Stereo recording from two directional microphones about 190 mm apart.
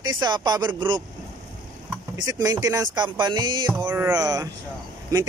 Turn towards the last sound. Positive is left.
turn(degrees=-20)  # may be behind; listen again after turning